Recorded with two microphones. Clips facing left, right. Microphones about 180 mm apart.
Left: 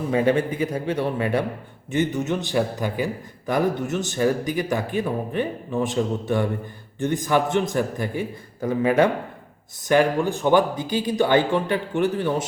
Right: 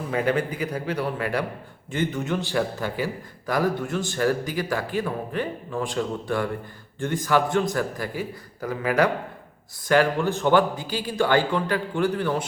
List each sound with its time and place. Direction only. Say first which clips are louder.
0.1 s a man's voice: left 4 dB; 25° left (ahead or behind)